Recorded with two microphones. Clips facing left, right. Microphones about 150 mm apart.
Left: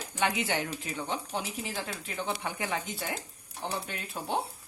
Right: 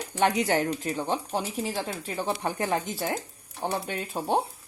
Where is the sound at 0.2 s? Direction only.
40° right (ahead or behind).